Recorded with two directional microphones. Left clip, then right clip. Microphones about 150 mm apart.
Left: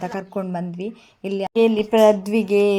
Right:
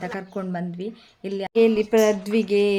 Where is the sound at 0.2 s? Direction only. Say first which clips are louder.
Left 3 dB; 15° left (ahead or behind).